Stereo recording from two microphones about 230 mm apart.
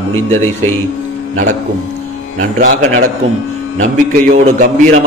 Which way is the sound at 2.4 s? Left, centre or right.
Right.